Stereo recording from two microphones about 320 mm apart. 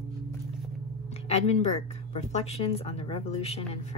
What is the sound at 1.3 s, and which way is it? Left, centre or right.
Speech, centre.